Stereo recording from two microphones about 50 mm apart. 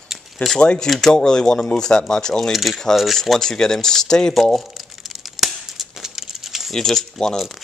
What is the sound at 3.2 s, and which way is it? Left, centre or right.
Speech, centre.